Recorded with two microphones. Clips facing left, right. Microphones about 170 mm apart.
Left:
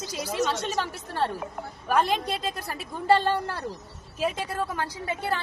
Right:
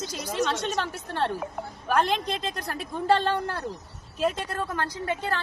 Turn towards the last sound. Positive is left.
turn(degrees=10)  # may be behind; listen again after turning